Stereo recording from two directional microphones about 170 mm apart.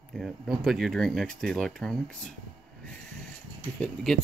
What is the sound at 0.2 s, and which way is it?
Speech, centre (ahead or behind).